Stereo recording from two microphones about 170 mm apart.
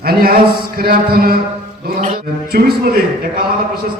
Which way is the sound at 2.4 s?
60° right (ahead or behind).